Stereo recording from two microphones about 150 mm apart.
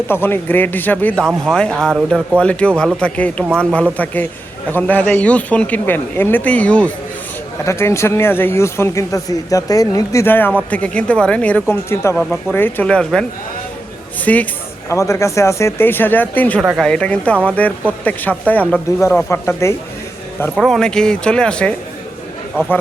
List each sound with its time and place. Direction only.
0.1 s speech: 15° left (ahead or behind)
16.6 s speech: centre (ahead or behind)
18.9 s speech: 20° left (ahead or behind)
20.6 s speech: centre (ahead or behind)